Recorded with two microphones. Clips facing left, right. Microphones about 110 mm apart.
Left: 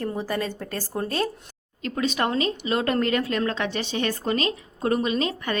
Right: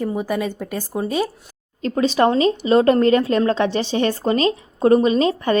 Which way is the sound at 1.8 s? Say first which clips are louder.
Right 8 dB; 30° right (ahead or behind).